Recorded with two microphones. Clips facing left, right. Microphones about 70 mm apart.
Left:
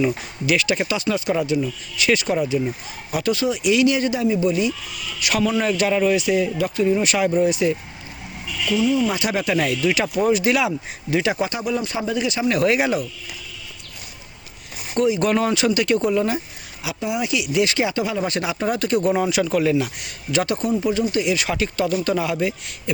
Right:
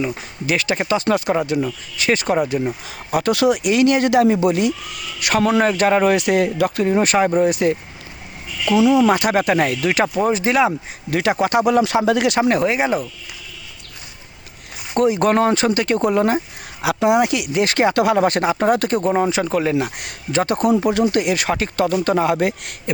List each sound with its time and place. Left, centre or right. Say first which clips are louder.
0.1 s speech: left 1 dB; right
8.7 s speech: right 6 dB; right
9.0 s speech: right 6 dB; right
11.1 s speech: right 4 dB; right
12.6 s speech: even; right
14.9 s speech: right 3 dB; right
16.8 s speech: right 9 dB; right
19.1 s speech: right 2 dB; right
20.6 s speech: right 5 dB; right